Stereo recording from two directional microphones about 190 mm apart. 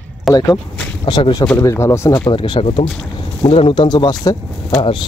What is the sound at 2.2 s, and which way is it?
Speech, 25° left (ahead or behind).